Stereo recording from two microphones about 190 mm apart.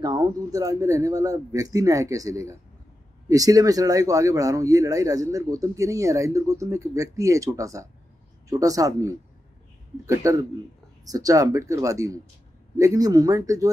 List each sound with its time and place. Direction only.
0.0 s speech: 20° right (ahead or behind)